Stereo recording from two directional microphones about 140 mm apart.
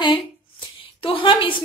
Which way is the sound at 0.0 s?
40° left (ahead or behind).